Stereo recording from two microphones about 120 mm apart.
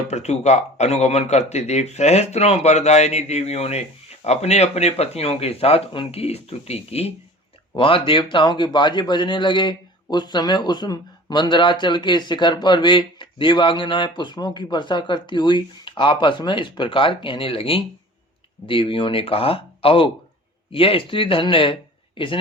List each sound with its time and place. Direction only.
0.1 s speech: 70° left (ahead or behind)
7.8 s a man's voice: 45° left (ahead or behind)